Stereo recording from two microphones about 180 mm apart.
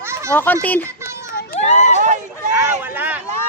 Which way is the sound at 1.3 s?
40° left (ahead or behind).